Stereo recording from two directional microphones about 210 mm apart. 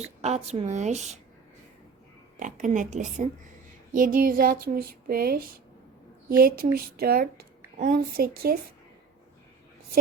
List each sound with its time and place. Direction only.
0.0 s a woman's voice: 30° right (ahead or behind)
2.4 s a woman's voice: 35° right (ahead or behind)